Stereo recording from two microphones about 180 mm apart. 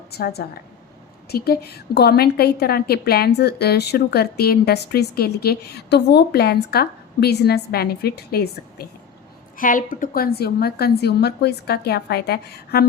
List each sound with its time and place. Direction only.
0.1 s a woman's voice: 60° left (ahead or behind)
9.6 s a woman's voice: 50° left (ahead or behind)